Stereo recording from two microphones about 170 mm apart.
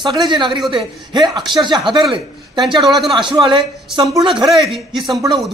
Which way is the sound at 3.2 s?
30° right (ahead or behind).